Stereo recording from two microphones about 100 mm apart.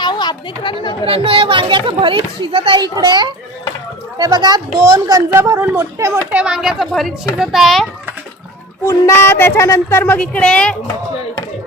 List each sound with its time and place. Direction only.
0.0 s chatter: 50° left (ahead or behind)
1.0 s a child's voice: 70° right (ahead or behind); by 5.2 s 40° right (ahead or behind)
5.3 s speech: 25° right (ahead or behind)
6.3 s speech: 10° right (ahead or behind)
8.8 s speech: 30° left (ahead or behind)
10.2 s a woman's voice: 10° left (ahead or behind)